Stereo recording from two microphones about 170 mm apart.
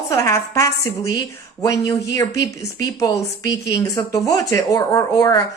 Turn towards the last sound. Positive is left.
turn(degrees=20)  # may be behind; listen again after turning